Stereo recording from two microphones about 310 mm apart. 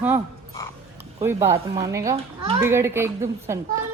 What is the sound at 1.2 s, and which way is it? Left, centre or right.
Speech, centre.